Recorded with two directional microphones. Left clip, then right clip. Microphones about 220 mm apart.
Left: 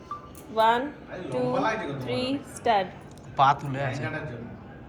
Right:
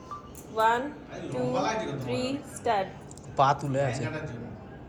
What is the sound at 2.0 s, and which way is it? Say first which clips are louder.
Speech: left 4 dB; 25° left (ahead or behind).